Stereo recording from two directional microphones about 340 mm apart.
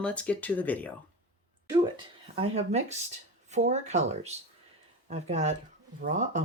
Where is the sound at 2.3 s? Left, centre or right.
Centre.